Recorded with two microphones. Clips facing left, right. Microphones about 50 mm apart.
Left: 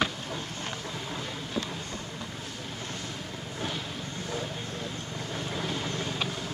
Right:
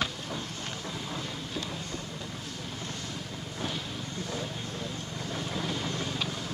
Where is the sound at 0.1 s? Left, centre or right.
Centre.